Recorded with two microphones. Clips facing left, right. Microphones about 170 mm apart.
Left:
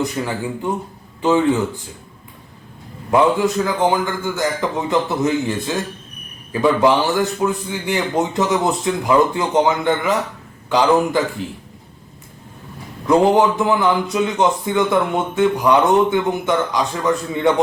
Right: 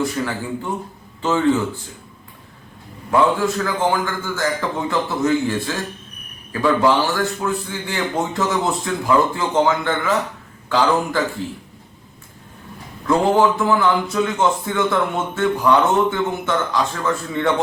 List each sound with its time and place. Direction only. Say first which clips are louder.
0.0 s a man's voice: left 1 dB; 15° left (ahead or behind)
3.1 s a man's voice: left 2 dB; 20° left (ahead or behind)
13.1 s a man's voice: left 2 dB; 20° left (ahead or behind)